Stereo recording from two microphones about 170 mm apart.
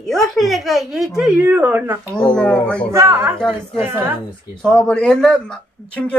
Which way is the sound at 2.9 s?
15° right (ahead or behind).